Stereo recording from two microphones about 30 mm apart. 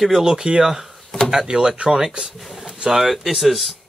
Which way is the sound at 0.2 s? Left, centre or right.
Centre.